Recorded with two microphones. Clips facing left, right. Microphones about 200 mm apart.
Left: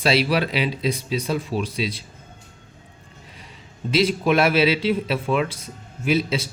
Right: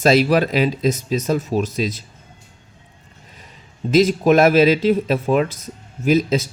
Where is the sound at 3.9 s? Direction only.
45° right (ahead or behind).